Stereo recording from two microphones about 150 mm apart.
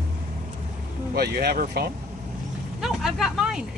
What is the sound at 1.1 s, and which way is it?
Speech, 90° right.